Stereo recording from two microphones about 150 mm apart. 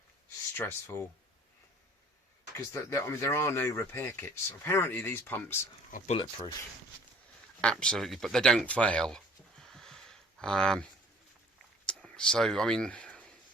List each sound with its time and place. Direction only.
0.5 s speech: 15° left (ahead or behind)
2.6 s speech: 20° left (ahead or behind)
7.6 s speech: 5° left (ahead or behind)
11.9 s a sound: 5° left (ahead or behind)